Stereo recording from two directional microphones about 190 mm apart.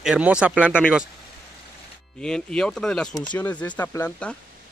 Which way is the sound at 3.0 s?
20° left (ahead or behind).